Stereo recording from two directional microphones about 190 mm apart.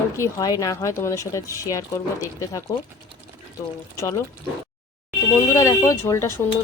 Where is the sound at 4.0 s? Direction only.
15° left (ahead or behind).